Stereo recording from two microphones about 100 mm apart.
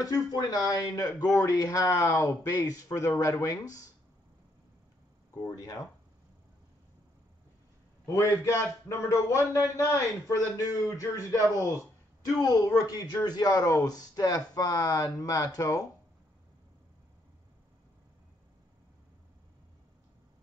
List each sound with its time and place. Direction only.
0.0 s speech: 40° left (ahead or behind)
5.5 s speech: 35° left (ahead or behind)
8.1 s speech: 30° left (ahead or behind)